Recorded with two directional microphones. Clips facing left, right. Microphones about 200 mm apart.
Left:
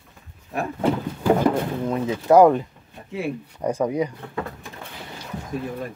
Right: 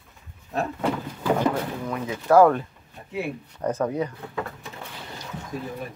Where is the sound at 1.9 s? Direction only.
20° left (ahead or behind).